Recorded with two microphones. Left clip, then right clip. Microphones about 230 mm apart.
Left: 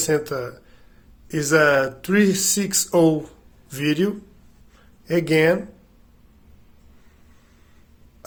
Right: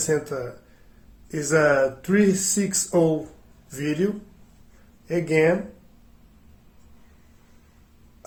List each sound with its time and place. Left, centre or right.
0.0 s speech: left
5.3 s speech: left